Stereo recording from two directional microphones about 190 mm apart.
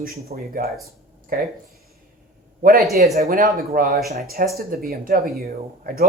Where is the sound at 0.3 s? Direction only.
45° right (ahead or behind).